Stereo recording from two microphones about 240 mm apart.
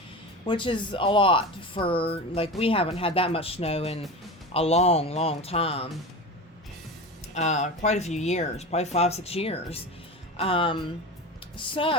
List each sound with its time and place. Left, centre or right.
0.4 s speech: centre
7.3 s speech: left